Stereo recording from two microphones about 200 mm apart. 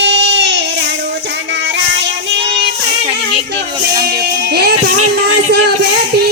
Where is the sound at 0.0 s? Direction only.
65° right (ahead or behind).